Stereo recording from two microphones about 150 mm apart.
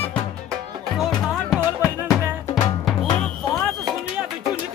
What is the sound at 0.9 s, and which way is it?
Music, 5° right (ahead or behind).